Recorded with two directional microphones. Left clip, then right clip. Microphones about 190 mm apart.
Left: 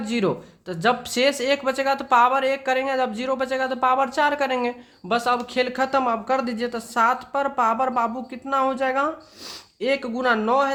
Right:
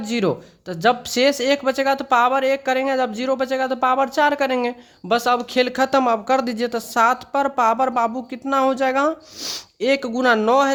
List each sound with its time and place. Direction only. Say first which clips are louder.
0.0 s speech: right 2 dB; 35° right (ahead or behind)